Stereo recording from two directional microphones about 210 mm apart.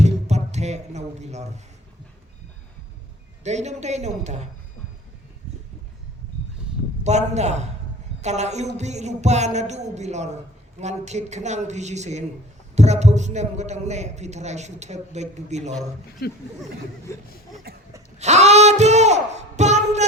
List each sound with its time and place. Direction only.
0.0 s a sound: 30° right (ahead or behind)
3.4 s a man's voice: 30° right (ahead or behind)
7.0 s a man's voice: 35° right (ahead or behind)
16.2 s speech: 50° left (ahead or behind)
18.2 s speech: 30° right (ahead or behind)